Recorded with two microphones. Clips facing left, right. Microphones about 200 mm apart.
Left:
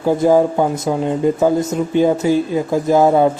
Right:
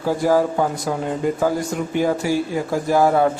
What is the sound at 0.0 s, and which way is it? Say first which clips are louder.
Speech: left 5 dB; 20° left (ahead or behind).